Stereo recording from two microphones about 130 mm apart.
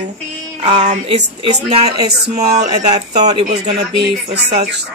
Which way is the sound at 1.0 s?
45° right (ahead or behind).